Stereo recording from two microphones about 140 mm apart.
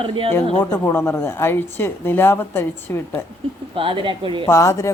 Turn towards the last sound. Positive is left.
turn(degrees=20)  # may be behind; listen again after turning